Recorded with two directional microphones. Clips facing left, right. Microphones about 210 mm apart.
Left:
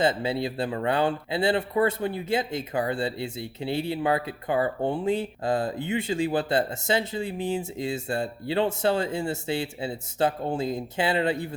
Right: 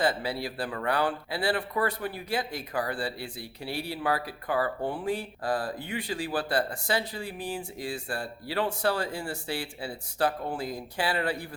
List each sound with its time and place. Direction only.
0.0 s speech: 25° left (ahead or behind)